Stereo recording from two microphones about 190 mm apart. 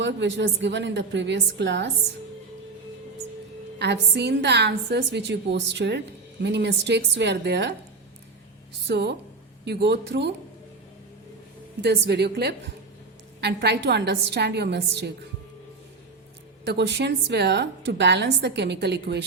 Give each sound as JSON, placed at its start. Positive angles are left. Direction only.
{"t": 0.0, "sound": "a woman's voice", "side_deg": -70}
{"t": 3.8, "sound": "a woman's voice", "side_deg": -65}
{"t": 8.9, "sound": "a woman's voice", "side_deg": -60}
{"t": 11.8, "sound": "a woman's voice", "side_deg": -65}
{"t": 16.6, "sound": "a woman's voice", "side_deg": -65}